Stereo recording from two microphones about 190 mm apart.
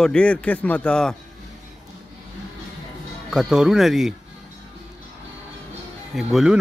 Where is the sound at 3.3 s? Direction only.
5° right (ahead or behind).